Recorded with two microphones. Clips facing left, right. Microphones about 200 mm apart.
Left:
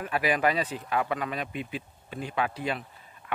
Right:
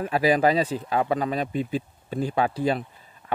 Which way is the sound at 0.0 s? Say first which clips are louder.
Right 6 dB; 35° right (ahead or behind).